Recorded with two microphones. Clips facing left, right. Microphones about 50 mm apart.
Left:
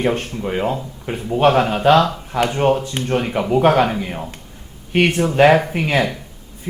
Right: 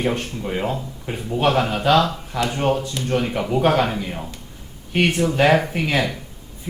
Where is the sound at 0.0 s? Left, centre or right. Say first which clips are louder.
Left 3 dB; left.